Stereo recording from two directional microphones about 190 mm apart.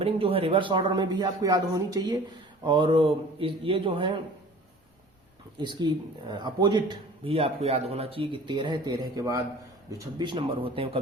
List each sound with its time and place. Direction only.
0.0 s speech: 30° right (ahead or behind)
5.5 s speech: 25° right (ahead or behind)